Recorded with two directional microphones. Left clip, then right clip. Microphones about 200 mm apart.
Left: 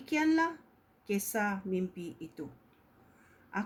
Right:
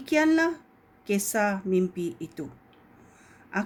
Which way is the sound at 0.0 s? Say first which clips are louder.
Right 7 dB; 40° right (ahead or behind).